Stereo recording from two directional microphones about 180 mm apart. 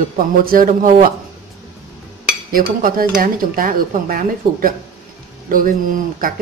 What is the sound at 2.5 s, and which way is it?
A woman's voice, 50° right (ahead or behind).